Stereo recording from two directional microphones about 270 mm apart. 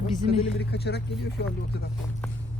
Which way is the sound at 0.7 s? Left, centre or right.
Left.